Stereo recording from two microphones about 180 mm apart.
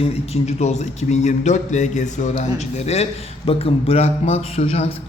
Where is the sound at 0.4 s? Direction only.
40° left (ahead or behind).